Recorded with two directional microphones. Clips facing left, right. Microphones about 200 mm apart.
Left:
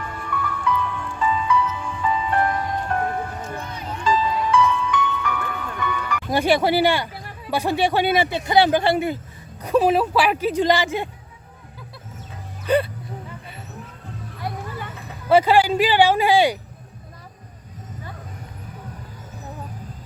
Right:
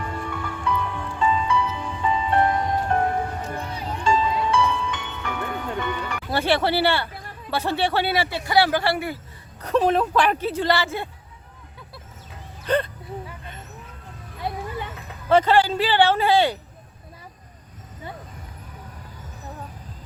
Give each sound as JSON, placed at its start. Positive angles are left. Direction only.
{"t": 0.4, "sound": "music", "side_deg": -30}
{"t": 6.3, "sound": "speech", "side_deg": 15}
{"t": 9.6, "sound": "speech", "side_deg": 10}
{"t": 12.6, "sound": "a sound", "side_deg": 10}
{"t": 15.3, "sound": "speech", "side_deg": 10}